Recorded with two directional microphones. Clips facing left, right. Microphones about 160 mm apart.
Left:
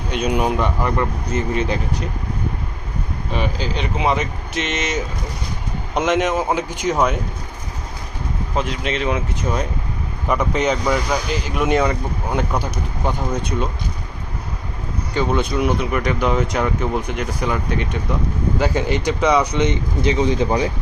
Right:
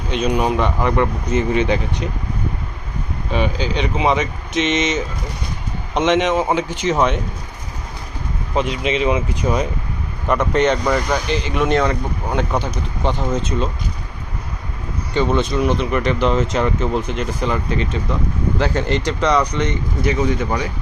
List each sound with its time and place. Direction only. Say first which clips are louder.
0.2 s speech: right 1 dB; 5° left (ahead or behind)
1.3 s speech: right 4 dB; 40° left (ahead or behind)
3.3 s speech: right 3 dB; centre (ahead or behind)
8.5 s speech: right 4 dB; centre (ahead or behind)
15.1 s speech: right 2 dB; 10° left (ahead or behind)
19.6 s speech: left 1 dB; 25° left (ahead or behind)